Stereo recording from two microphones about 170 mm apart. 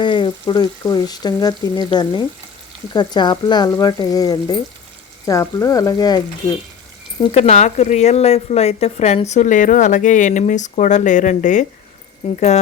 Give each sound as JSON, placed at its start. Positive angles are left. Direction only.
{"t": 0.0, "sound": "speech", "side_deg": 25}
{"t": 7.3, "sound": "speech", "side_deg": 40}
{"t": 12.2, "sound": "speech", "side_deg": 35}